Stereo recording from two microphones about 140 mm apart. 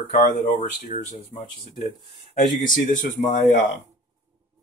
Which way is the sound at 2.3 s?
65° left (ahead or behind).